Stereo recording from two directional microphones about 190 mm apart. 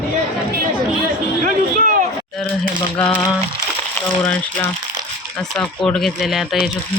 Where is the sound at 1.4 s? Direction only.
45° right (ahead or behind).